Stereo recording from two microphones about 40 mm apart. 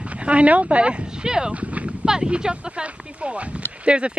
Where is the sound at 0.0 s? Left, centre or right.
Right.